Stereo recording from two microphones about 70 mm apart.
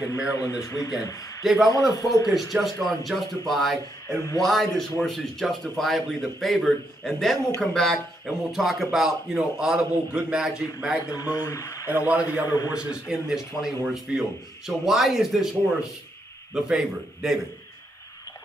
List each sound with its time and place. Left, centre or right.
0.0 s a man's voice: left
1.4 s a man's voice: centre
1.7 s a man's voice: left
2.5 s speech: centre
8.3 s a man's voice: centre
11.2 s a man's voice: left
12.1 s a man's voice: centre
13.1 s a man's voice: centre